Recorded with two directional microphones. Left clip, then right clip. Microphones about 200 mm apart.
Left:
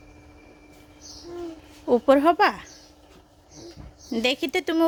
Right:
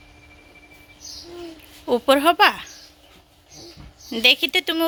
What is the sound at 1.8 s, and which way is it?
Speech, 15° left (ahead or behind).